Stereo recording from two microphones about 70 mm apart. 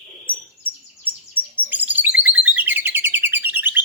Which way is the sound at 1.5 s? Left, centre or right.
Right.